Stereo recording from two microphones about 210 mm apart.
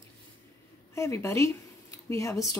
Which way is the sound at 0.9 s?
15° left (ahead or behind).